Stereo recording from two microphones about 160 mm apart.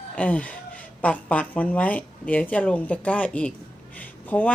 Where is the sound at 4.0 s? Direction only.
10° left (ahead or behind).